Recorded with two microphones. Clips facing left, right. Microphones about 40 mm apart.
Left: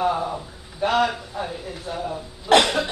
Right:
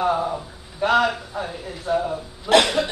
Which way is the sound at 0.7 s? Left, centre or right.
Centre.